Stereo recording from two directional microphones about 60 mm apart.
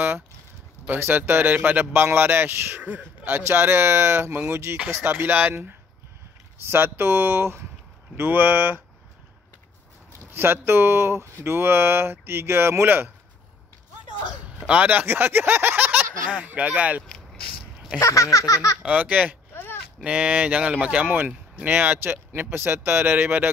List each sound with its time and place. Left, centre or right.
0.9 s speech: right
1.9 s speech: right
2.8 s speech: right
3.4 s speech: right
4.8 s speech: right
8.2 s speech: right
10.3 s speech: right
14.7 s speech: right
18.0 s a sound: left
18.8 s speech: right
19.5 s a sound: left
20.0 s speech: centre; by 23.5 s right